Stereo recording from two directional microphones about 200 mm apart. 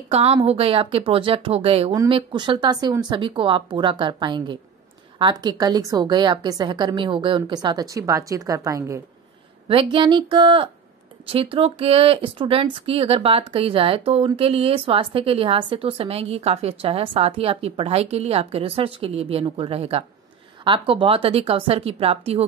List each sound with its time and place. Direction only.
0.1 s speech: 30° right (ahead or behind)